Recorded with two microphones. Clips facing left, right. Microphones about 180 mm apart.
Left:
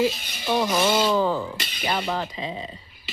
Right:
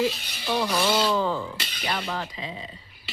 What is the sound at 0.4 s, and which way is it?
Speech, 20° left (ahead or behind).